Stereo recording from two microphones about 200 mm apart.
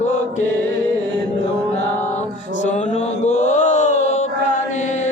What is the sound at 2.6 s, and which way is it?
Mantra, 35° left (ahead or behind).